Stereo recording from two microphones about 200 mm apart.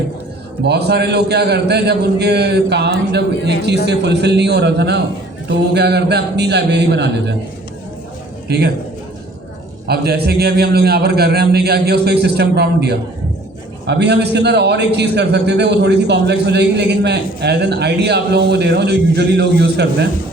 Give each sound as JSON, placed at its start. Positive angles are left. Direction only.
{"t": 0.6, "sound": "a man's voice", "side_deg": -55}
{"t": 8.4, "sound": "a man's voice", "side_deg": -55}
{"t": 9.8, "sound": "a man's voice", "side_deg": -55}